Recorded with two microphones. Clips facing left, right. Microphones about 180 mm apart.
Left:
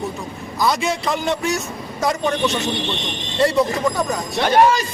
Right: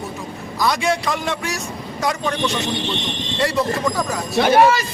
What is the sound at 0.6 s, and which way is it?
Speech, centre (ahead or behind).